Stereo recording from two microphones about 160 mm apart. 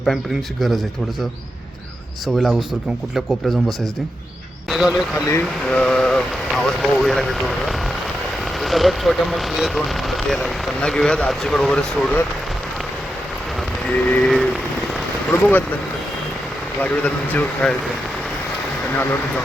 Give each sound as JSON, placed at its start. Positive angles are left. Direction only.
{"t": 2.2, "sound": "speech", "side_deg": 0}
{"t": 4.7, "sound": "speech", "side_deg": -5}
{"t": 5.2, "sound": "speech", "side_deg": 15}
{"t": 5.6, "sound": "vehicle", "side_deg": 5}
{"t": 8.6, "sound": "speech", "side_deg": 0}
{"t": 13.8, "sound": "vehicle", "side_deg": 5}
{"t": 15.3, "sound": "speech", "side_deg": 10}
{"t": 16.8, "sound": "speech", "side_deg": 10}